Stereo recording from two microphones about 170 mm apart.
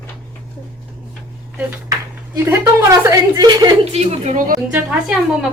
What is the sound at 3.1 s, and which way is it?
Speech, 20° right (ahead or behind).